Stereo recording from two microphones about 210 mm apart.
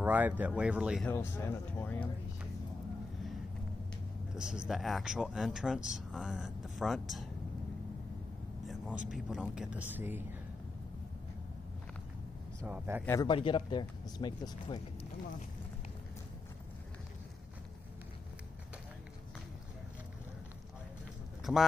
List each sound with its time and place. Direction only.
0.0 s speech: 10° right (ahead or behind)
1.0 s speech: 10° left (ahead or behind)
4.4 s speech: 5° right (ahead or behind)
8.6 s vehicle: 5° right (ahead or behind)
9.1 s speech: 5° right (ahead or behind)
12.5 s speech: 10° right (ahead or behind)
13.0 s speech: 15° left (ahead or behind)
21.5 s speech: 5° left (ahead or behind)